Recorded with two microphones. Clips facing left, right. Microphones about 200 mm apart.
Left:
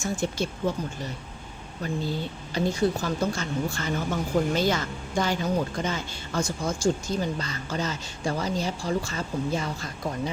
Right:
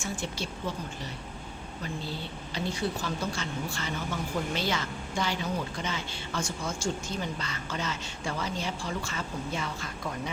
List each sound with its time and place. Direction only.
0.0 s speech: 45° left (ahead or behind)
2.6 s speech: 45° left (ahead or behind)